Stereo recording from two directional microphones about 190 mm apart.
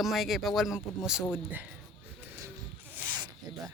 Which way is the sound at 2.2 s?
15° right (ahead or behind).